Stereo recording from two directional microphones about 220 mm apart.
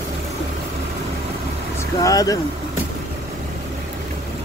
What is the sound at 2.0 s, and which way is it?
Vehicle, 15° left (ahead or behind).